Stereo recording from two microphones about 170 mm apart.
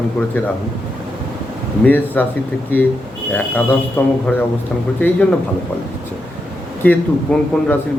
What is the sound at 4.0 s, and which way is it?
A man's voice, 10° left (ahead or behind).